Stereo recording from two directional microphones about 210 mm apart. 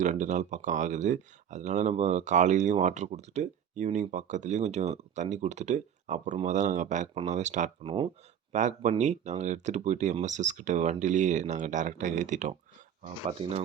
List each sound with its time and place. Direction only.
0.0 s speech: 35° right (ahead or behind)